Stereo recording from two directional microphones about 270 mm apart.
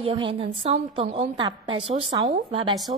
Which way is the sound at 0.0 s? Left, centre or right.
Centre.